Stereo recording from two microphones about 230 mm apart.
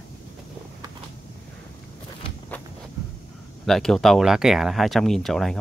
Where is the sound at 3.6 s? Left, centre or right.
Centre.